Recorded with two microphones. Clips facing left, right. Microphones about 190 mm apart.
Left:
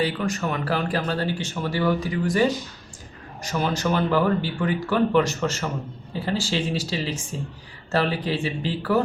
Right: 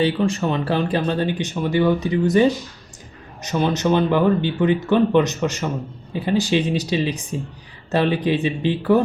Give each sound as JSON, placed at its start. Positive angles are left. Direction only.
{"t": 0.0, "sound": "speech", "side_deg": -25}